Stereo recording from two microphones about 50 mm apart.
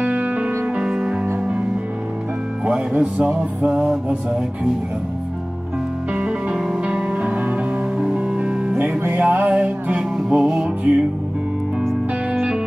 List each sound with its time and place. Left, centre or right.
0.0 s music: right
3.0 s music: right
6.1 s music: centre
7.1 s music: right
8.0 s music: centre
10.8 s music: right